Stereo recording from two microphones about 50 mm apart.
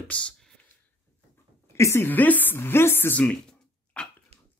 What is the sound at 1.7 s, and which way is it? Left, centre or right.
Speech, left.